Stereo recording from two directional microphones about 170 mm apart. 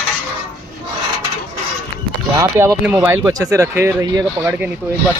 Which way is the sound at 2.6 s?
10° right (ahead or behind).